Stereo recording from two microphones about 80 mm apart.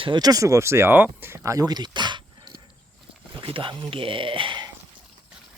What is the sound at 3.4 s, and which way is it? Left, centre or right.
Speech, right.